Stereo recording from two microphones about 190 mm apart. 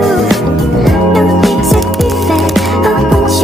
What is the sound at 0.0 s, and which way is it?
Music, centre (ahead or behind).